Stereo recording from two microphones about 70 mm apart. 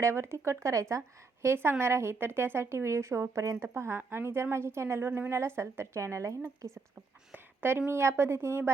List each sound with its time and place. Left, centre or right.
0.0 s speech: right
7.3 s speech: right